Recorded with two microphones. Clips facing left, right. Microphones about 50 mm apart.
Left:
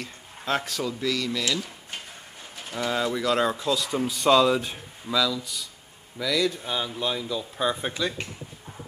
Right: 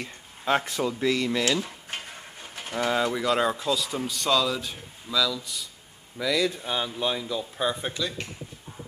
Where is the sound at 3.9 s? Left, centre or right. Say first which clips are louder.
Left 5 dB; centre.